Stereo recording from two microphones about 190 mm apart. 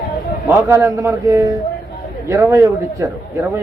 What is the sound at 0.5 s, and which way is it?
A man's voice, 15° right (ahead or behind).